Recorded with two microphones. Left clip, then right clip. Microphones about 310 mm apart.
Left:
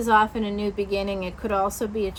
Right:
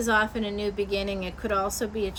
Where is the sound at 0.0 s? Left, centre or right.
Centre.